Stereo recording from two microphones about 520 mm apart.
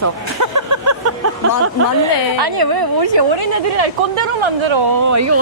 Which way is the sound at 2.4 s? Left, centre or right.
Right.